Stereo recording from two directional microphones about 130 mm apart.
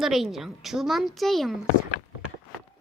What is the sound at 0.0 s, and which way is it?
A woman's voice, centre (ahead or behind).